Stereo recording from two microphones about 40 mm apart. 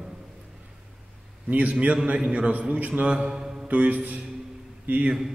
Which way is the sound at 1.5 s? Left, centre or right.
Right.